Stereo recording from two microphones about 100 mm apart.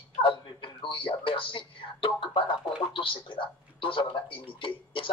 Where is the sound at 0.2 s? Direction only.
55° left (ahead or behind).